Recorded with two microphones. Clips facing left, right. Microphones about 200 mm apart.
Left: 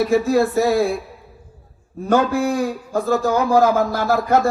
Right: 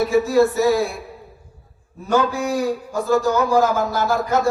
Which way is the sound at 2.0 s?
55° left (ahead or behind).